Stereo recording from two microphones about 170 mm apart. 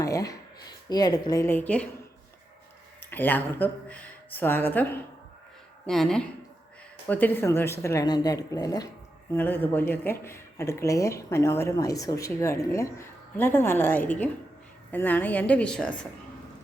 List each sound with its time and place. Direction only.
0.0 s a sound: 20° left (ahead or behind)
0.9 s a woman's voice: 25° left (ahead or behind)
3.0 s speech: 10° left (ahead or behind)
9.3 s speech: 10° left (ahead or behind)